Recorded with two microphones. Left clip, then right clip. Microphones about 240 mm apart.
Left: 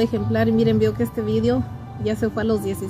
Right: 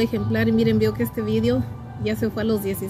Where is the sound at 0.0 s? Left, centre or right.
Centre.